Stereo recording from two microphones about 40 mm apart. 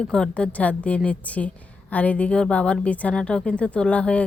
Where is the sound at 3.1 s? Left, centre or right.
Centre.